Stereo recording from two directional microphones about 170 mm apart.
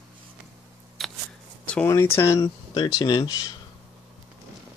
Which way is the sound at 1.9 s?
15° left (ahead or behind).